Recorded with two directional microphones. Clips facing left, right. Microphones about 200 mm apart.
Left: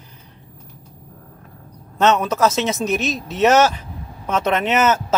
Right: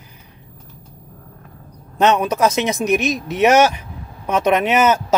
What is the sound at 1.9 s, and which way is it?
Speech, 15° right (ahead or behind).